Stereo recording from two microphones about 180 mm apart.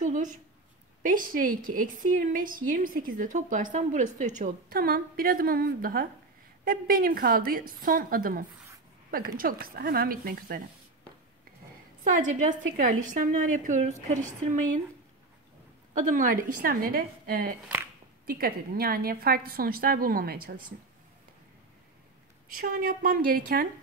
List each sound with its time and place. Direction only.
0.0 s a sound: 45° right (ahead or behind)
1.0 s a woman's voice: 50° right (ahead or behind)
12.4 s a woman's voice: 45° right (ahead or behind)
15.9 s a woman's voice: 45° right (ahead or behind)
22.5 s a woman's voice: 50° right (ahead or behind)